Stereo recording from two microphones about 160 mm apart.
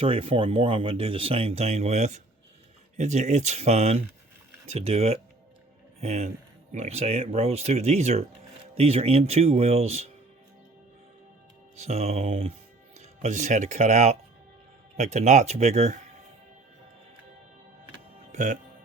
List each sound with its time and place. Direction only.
0.0 s speech: 35° right (ahead or behind)
11.8 s speech: 40° right (ahead or behind)
18.3 s speech: 50° right (ahead or behind)